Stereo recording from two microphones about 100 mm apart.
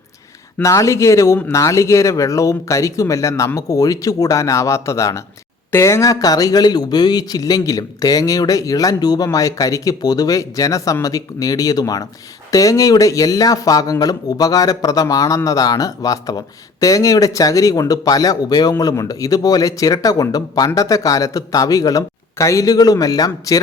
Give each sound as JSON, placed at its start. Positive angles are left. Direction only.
{"t": 0.6, "sound": "speech", "side_deg": 30}